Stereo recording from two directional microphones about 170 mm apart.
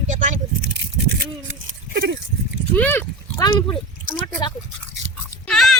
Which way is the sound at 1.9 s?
90° right.